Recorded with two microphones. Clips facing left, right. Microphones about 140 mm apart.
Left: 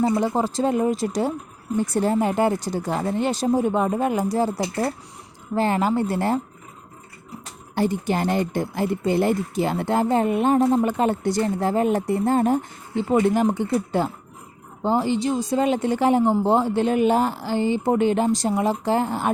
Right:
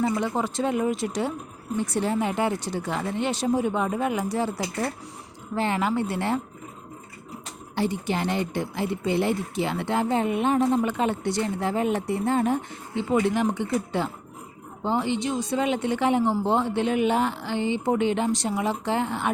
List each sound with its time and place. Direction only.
0.0 s speech: 35° left (ahead or behind)
7.8 s speech: 45° left (ahead or behind)